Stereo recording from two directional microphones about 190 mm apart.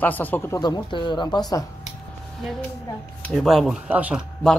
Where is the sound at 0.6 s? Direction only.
25° left (ahead or behind).